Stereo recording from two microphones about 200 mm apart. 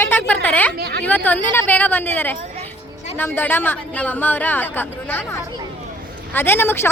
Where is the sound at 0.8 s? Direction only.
55° right (ahead or behind).